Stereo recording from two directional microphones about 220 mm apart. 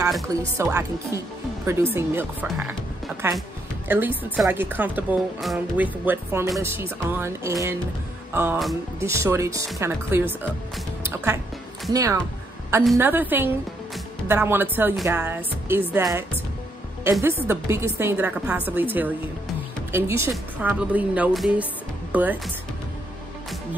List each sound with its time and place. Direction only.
0.6 s a woman's voice: 15° right (ahead or behind)
3.9 s a woman's voice: 10° right (ahead or behind)
8.3 s music: 10° right (ahead or behind)
9.0 s a woman's voice: 10° right (ahead or behind)
11.0 s music: 10° right (ahead or behind)
11.9 s a woman's voice: 15° right (ahead or behind)